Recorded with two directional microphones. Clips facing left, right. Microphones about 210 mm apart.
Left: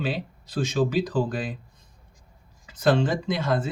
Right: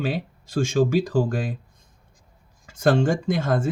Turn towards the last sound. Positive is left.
turn(degrees=-50)  # may be behind; listen again after turning